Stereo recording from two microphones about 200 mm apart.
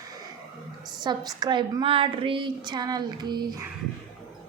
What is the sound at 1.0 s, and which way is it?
A woman's voice, 20° right (ahead or behind).